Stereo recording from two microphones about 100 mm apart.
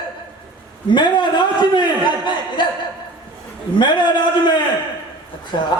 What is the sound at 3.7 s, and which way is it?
Speech, 50° left (ahead or behind).